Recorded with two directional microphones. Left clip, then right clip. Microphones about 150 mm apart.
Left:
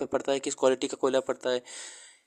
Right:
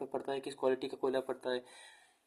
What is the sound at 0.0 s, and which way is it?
Speech, 45° left (ahead or behind).